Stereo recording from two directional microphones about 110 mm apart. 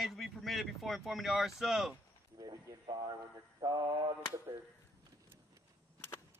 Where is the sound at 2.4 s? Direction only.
40° right (ahead or behind).